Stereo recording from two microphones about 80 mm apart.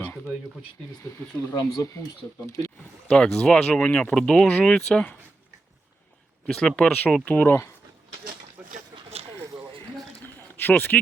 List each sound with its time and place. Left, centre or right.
1.5 s speech: left
3.1 s speech: centre
6.5 s speech: centre
7.3 s speech: left
8.6 s a sound: centre
10.2 s a sound: left